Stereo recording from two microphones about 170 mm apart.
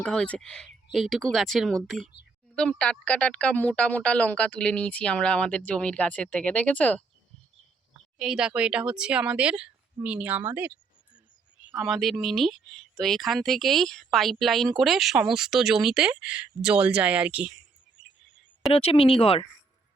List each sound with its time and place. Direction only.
0.0 s speech: 5° left (ahead or behind)
8.2 s speech: 5° right (ahead or behind)
11.8 s speech: centre (ahead or behind)
18.7 s speech: 35° left (ahead or behind)